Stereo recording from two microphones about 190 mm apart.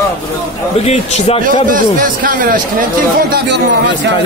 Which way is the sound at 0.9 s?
35° left (ahead or behind).